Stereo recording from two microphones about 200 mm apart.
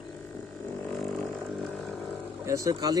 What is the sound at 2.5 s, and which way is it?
Speech, 15° right (ahead or behind).